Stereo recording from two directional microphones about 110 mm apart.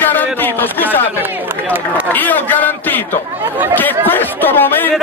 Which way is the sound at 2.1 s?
15° left (ahead or behind).